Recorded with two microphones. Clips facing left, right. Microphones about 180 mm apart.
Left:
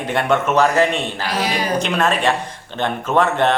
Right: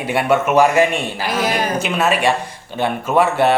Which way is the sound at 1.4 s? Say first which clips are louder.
Right 3 dB; 50° right (ahead or behind).